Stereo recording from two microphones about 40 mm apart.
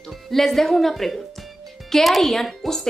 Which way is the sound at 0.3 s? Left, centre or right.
Centre.